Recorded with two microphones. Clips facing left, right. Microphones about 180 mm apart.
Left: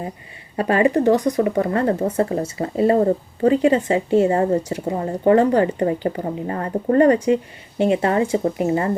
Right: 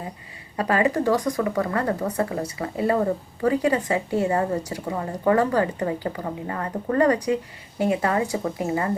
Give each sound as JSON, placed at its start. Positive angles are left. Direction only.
{"t": 0.5, "sound": "a woman's voice", "side_deg": 25}